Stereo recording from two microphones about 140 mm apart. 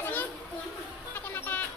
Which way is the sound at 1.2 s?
10° left (ahead or behind).